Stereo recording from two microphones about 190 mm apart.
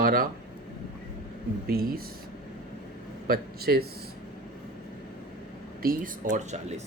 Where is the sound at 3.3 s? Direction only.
55° right (ahead or behind).